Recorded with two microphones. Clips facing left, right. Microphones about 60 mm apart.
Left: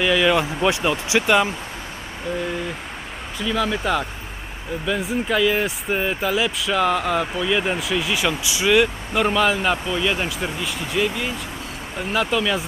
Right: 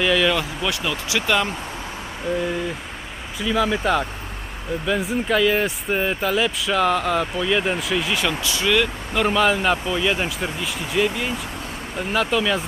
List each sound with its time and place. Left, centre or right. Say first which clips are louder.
0.0 s speech: left 1 dB; centre
0.3 s speech: left 5 dB; left
3.3 s speech: right 2 dB; centre
9.2 s speech: right 1 dB; centre